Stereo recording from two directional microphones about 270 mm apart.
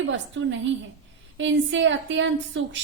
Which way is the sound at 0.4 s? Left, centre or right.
Right.